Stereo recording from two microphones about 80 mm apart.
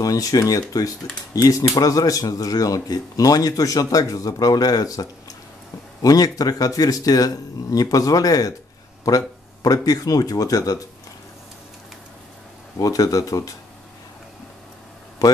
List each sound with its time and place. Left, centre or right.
0.0 s speech: left
6.0 s speech: left
12.7 s speech: left